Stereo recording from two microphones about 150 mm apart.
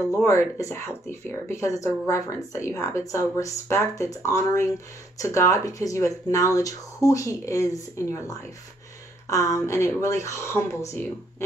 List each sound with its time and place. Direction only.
0.1 s speech: 20° left (ahead or behind)